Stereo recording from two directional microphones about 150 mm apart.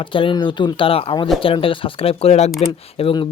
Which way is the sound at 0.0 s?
35° left (ahead or behind).